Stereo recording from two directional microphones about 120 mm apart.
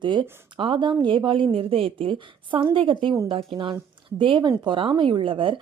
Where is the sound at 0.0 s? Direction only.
40° right (ahead or behind).